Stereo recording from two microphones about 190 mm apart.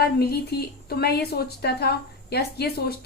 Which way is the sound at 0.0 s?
55° left (ahead or behind).